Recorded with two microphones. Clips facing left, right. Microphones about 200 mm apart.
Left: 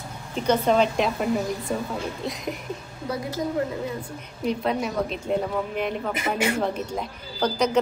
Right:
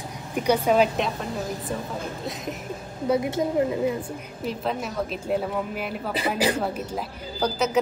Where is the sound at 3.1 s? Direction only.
25° right (ahead or behind).